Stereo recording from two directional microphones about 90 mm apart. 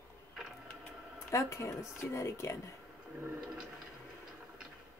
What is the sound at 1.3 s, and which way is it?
Female singing, 35° left (ahead or behind).